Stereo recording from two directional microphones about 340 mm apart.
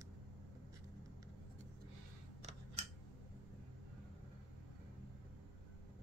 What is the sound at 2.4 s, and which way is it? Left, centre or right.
Scissors, centre.